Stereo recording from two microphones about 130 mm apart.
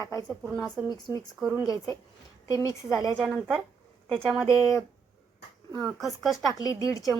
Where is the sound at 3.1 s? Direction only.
10° right (ahead or behind).